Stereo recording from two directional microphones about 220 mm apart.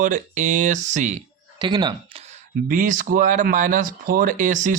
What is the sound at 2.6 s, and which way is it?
Speech, 35° right (ahead or behind).